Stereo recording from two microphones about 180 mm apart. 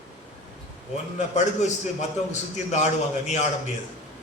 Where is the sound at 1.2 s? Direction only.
40° left (ahead or behind).